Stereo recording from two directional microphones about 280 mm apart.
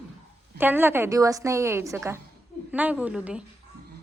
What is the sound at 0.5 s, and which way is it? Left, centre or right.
A woman's voice, centre.